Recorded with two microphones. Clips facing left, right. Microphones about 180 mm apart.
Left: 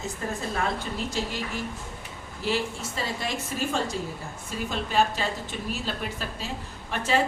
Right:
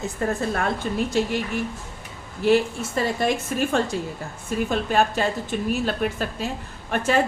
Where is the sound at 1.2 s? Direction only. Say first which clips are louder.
Right 9 dB; 55° right (ahead or behind).